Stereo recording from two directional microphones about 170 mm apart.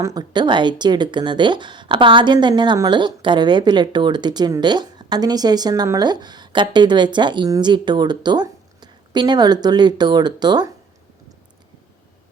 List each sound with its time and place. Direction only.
0.0 s speech: 25° right (ahead or behind)